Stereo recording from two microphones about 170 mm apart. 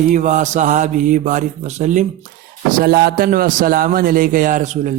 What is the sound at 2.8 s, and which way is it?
A man's voice, 60° right (ahead or behind).